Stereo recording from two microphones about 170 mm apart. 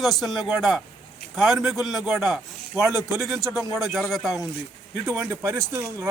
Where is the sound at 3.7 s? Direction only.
Centre (ahead or behind).